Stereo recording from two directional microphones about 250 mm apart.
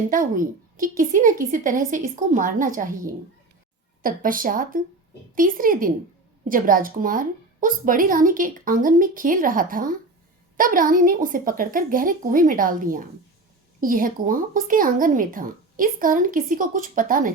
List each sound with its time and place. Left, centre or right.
0.1 s a woman's voice: right
4.0 s a woman's voice: right